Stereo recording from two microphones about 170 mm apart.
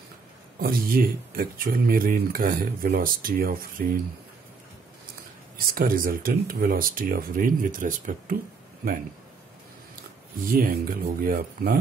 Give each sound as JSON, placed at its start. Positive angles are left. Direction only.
{"t": 0.6, "sound": "speech", "side_deg": -60}
{"t": 5.7, "sound": "speech", "side_deg": -55}
{"t": 10.4, "sound": "speech", "side_deg": -55}